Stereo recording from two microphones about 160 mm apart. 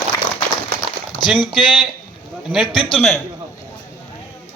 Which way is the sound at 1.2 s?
30° left (ahead or behind).